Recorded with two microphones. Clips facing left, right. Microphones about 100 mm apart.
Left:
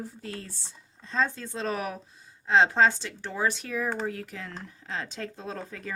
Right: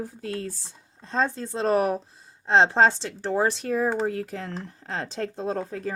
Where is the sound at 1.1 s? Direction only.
35° right (ahead or behind).